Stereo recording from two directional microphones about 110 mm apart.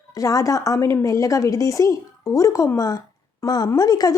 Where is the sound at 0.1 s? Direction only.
30° left (ahead or behind).